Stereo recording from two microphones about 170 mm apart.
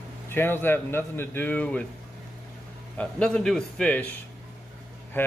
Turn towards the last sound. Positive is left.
turn(degrees=10)  # may be behind; listen again after turning